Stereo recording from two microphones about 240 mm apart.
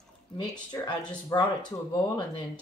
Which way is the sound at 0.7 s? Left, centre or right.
Centre.